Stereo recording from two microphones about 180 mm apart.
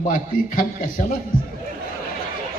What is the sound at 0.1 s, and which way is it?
A man's voice, 50° left (ahead or behind).